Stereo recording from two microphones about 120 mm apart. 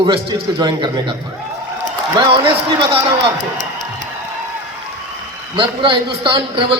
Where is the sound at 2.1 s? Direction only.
45° right (ahead or behind).